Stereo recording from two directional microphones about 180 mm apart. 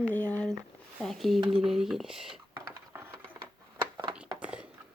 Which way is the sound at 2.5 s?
15° right (ahead or behind).